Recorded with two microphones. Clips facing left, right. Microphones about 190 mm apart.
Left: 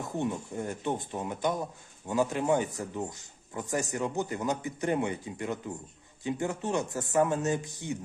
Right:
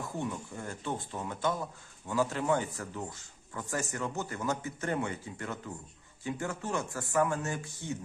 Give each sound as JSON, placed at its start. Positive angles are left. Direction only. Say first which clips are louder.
{"t": 0.2, "sound": "speech", "louder": "left 7 dB", "side_deg": 20}